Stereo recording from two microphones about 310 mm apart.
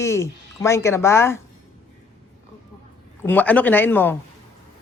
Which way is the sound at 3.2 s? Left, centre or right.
Centre.